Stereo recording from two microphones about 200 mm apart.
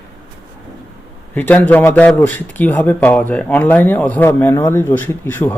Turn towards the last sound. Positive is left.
turn(degrees=10)  # may be behind; listen again after turning